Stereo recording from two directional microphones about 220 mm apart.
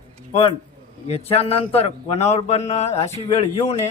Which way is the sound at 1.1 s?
25° left (ahead or behind).